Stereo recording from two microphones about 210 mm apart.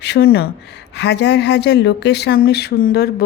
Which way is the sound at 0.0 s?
50° left (ahead or behind).